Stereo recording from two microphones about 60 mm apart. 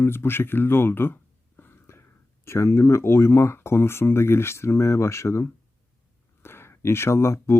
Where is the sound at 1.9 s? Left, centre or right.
Left.